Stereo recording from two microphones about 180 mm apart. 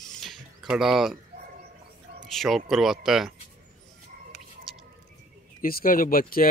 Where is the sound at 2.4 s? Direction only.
Centre (ahead or behind).